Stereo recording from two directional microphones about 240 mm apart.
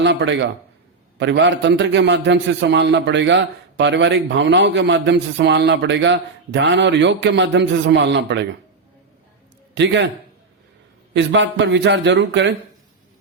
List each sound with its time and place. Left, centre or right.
0.0 s a man's voice: right
9.7 s a man's voice: right
11.1 s a man's voice: right